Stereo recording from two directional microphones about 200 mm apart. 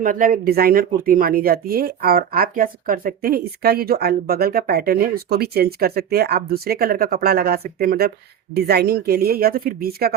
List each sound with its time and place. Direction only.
0.0 s speech: 45° right (ahead or behind)